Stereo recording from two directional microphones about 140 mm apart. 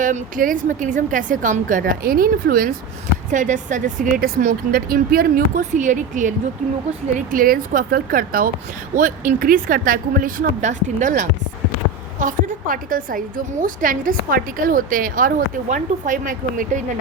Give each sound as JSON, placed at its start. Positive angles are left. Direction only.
{"t": 0.0, "sound": "a woman's voice", "side_deg": -70}
{"t": 3.3, "sound": "a woman's voice", "side_deg": -65}
{"t": 7.3, "sound": "speech", "side_deg": -85}
{"t": 9.0, "sound": "a woman's voice", "side_deg": -75}